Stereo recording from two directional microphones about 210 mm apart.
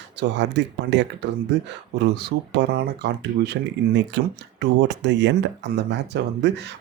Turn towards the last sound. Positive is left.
turn(degrees=-55)  # may be behind; listen again after turning